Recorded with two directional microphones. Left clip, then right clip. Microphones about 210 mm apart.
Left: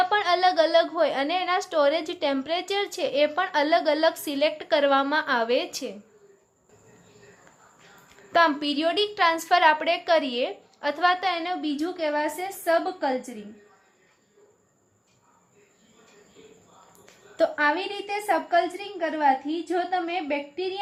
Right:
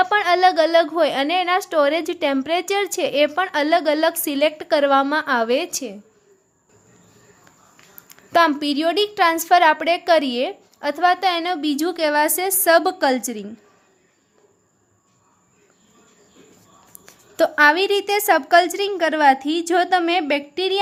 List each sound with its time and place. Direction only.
0.0 s a woman's voice: 30° right (ahead or behind)
8.1 s a woman's voice: 35° right (ahead or behind)
17.3 s a woman's voice: 40° right (ahead or behind)